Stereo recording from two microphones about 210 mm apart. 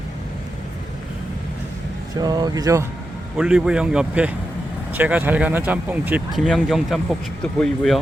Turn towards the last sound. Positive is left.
turn(degrees=0)  # may be behind; listen again after turning